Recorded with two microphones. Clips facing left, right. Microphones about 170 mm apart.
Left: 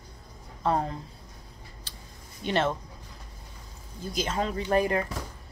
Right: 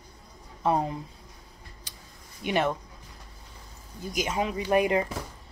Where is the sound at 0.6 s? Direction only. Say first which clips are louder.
Right 1 dB; 15° right (ahead or behind).